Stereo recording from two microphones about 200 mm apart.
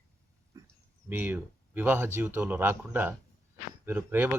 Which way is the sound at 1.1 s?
10° right (ahead or behind).